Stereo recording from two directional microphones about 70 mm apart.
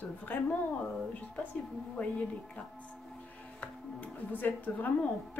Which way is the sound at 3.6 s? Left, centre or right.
Left.